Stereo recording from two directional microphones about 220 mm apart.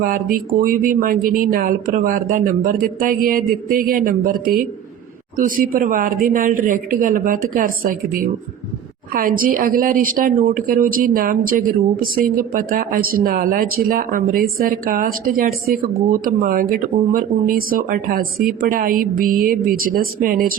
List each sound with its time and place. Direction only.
0.0 s speech: 40° right (ahead or behind)